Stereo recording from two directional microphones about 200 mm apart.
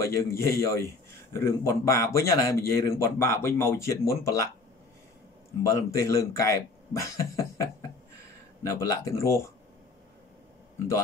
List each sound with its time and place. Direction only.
0.0 s a man's voice: 15° left (ahead or behind)
5.7 s a man's voice: 15° left (ahead or behind)
6.9 s a sound: 15° left (ahead or behind)
8.6 s a man's voice: 15° left (ahead or behind)